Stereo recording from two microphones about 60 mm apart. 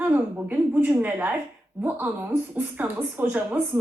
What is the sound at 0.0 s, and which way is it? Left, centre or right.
A woman's voice, right.